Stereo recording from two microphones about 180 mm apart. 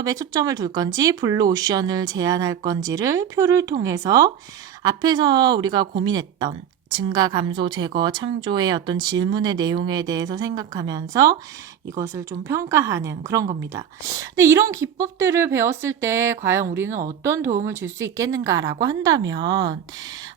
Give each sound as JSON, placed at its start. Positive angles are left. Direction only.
{"t": 0.0, "sound": "a woman's voice", "side_deg": -20}